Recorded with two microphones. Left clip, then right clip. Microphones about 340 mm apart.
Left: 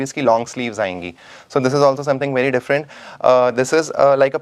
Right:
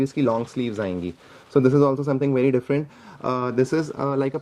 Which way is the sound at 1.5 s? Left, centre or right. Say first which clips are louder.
Left 4 dB; left.